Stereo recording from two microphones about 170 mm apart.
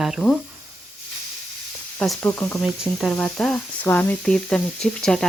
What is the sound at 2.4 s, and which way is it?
Speech, centre (ahead or behind).